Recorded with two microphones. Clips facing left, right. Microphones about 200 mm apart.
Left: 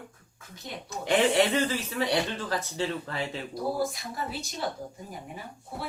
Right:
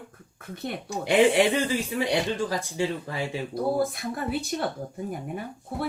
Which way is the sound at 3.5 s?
55° right (ahead or behind).